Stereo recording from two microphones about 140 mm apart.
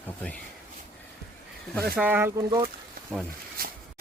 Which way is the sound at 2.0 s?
15° right (ahead or behind).